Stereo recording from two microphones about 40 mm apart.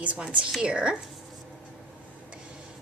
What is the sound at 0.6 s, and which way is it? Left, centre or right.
Speech, right.